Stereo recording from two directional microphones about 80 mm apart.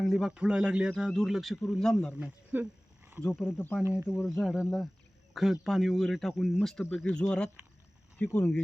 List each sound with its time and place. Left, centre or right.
0.0 s speech: centre
0.3 s speech: centre
2.1 s wild animals: right
3.4 s speech: left
4.1 s speech: centre; by 8.6 s left